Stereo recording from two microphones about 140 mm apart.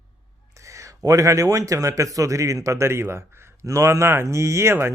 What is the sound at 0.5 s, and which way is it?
Speech, 20° right (ahead or behind).